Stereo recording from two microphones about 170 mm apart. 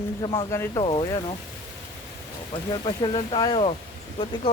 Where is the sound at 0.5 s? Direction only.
20° left (ahead or behind).